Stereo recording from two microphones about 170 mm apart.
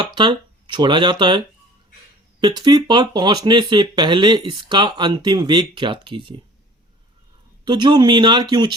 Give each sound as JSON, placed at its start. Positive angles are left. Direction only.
{"t": 0.0, "sound": "speech", "side_deg": -30}
{"t": 7.6, "sound": "speech", "side_deg": -25}